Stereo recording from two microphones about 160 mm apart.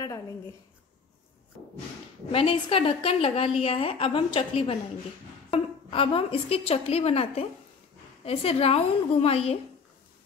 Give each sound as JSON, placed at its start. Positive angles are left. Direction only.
{"t": 2.3, "sound": "a woman's voice", "side_deg": 35}